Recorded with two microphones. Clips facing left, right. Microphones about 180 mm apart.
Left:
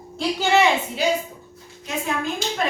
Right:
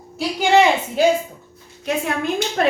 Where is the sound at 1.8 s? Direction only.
65° right (ahead or behind).